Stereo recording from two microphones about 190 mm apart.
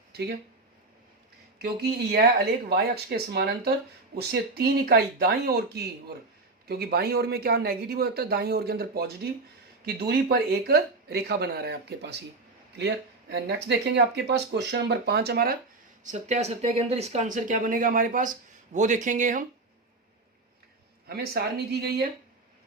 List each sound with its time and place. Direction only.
0.1 s speech: 60° right (ahead or behind)
1.5 s speech: 60° right (ahead or behind)
16.0 s speech: 40° right (ahead or behind)
21.1 s speech: 55° right (ahead or behind)